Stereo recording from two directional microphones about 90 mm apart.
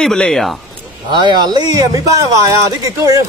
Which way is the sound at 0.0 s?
5° left (ahead or behind).